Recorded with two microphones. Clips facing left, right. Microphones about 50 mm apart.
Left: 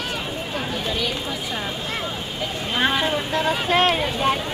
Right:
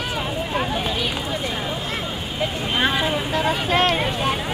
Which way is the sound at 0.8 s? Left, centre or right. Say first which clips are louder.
Right 1 dB; centre.